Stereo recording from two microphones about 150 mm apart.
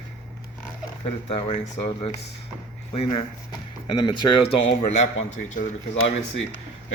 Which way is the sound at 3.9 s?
30° left (ahead or behind).